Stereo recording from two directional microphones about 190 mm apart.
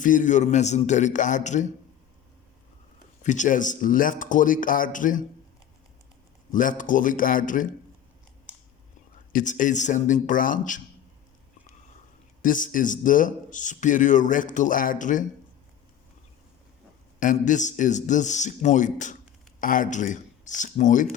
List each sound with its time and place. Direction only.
0.0 s a man's voice: 45° left (ahead or behind)
3.2 s speech: 40° left (ahead or behind)
6.5 s speech: 45° left (ahead or behind)
8.5 s a sound: 10° right (ahead or behind)
9.3 s speech: 40° left (ahead or behind)
12.4 s speech: 45° left (ahead or behind)
17.2 s a man's voice: 40° left (ahead or behind)